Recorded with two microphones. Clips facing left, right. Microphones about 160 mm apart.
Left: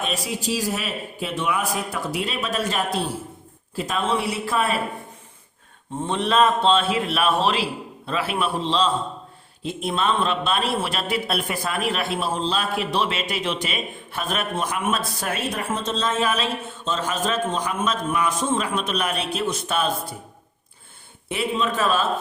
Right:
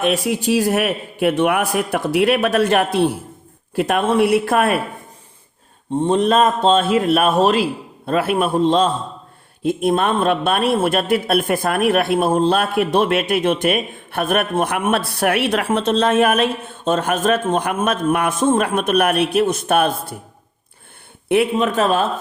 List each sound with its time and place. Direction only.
0.0 s speech: 65° right (ahead or behind)
6.0 s a man's voice: 40° right (ahead or behind)
21.2 s speech: 60° right (ahead or behind)